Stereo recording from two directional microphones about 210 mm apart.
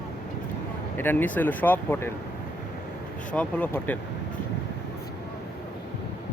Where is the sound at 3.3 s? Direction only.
5° left (ahead or behind).